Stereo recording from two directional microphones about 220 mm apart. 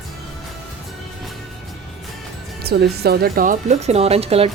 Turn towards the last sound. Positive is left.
turn(degrees=-25)  # may be behind; listen again after turning